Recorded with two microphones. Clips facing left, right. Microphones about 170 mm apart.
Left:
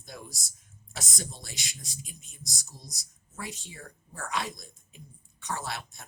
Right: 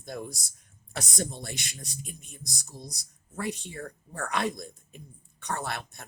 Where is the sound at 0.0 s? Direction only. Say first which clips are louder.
Right 7 dB; 55° right (ahead or behind).